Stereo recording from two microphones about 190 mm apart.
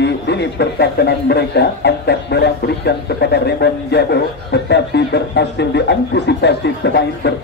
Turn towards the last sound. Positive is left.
turn(degrees=65)  # may be behind; listen again after turning